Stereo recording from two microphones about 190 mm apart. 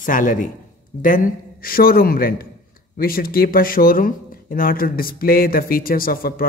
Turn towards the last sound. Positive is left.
turn(degrees=50)  # may be behind; listen again after turning